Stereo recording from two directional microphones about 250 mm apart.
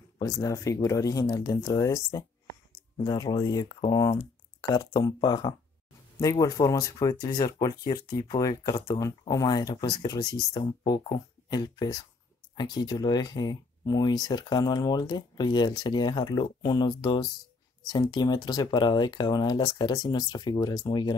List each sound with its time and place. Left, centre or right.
0.2 s speech: centre